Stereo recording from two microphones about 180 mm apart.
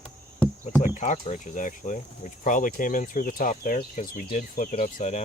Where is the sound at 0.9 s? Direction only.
40° left (ahead or behind).